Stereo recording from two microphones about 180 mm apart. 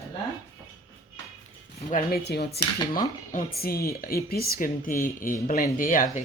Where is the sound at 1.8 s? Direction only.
55° left (ahead or behind).